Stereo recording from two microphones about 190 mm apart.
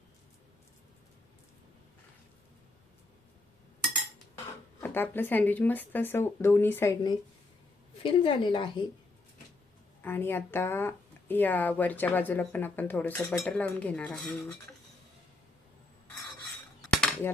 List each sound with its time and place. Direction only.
4.8 s a woman's voice: 10° left (ahead or behind)
10.0 s speech: 10° left (ahead or behind)
13.4 s dishes: 5° left (ahead or behind)
16.9 s cutlery: 5° left (ahead or behind)